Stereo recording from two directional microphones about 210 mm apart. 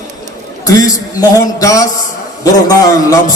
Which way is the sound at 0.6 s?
15° left (ahead or behind).